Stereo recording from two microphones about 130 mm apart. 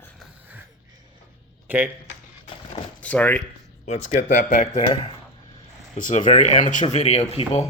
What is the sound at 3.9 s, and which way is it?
Speech, 60° left (ahead or behind).